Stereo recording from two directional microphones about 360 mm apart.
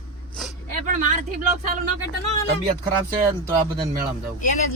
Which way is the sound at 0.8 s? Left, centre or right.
Right.